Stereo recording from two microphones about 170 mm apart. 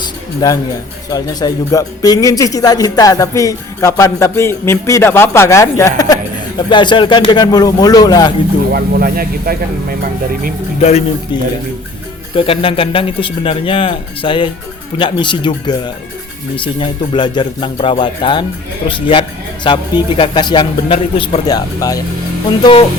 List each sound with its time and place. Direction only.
0.0 s a sound: 25° left (ahead or behind)
1.1 s speech: 25° left (ahead or behind)
8.7 s speech: 60° right (ahead or behind)
10.8 s speech: 40° left (ahead or behind)
12.3 s speech: 35° left (ahead or behind)